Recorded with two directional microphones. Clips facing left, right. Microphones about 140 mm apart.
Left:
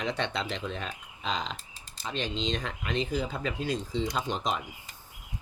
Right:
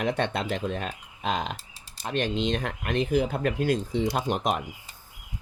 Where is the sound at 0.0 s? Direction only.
50° right (ahead or behind).